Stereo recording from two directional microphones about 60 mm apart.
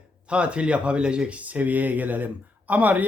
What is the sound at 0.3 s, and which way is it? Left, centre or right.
Speech, centre.